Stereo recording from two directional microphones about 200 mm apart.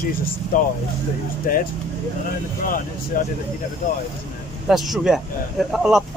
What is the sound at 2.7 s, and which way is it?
Speech, 45° left (ahead or behind).